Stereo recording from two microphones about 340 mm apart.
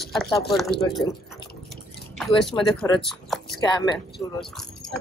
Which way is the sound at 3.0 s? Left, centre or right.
Centre.